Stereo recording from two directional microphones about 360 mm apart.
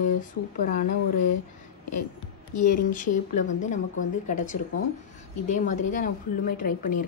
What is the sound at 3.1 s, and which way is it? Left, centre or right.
Speech, centre.